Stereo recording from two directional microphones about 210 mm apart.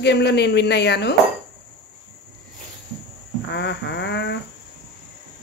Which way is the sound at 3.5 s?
55° left (ahead or behind).